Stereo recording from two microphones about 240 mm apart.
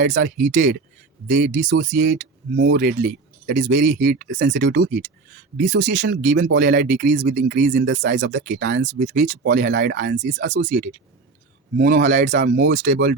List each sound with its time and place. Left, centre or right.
0.2 s speech: right
1.6 s speech: right
1.9 s speech: right
4.5 s speech: right
11.8 s speech: right
12.6 s speech: right
12.9 s speech: right